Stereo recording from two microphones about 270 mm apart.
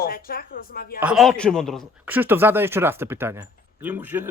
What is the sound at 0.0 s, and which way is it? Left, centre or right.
Speech, left.